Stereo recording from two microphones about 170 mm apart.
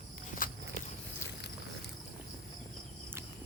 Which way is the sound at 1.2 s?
15° left (ahead or behind).